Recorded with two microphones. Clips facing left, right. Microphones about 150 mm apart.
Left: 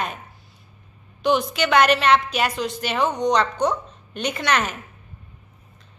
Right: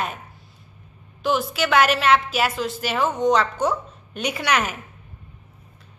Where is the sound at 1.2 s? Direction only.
5° right (ahead or behind).